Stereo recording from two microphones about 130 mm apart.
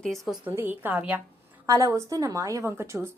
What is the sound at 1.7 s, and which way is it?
A woman's voice, 25° right (ahead or behind).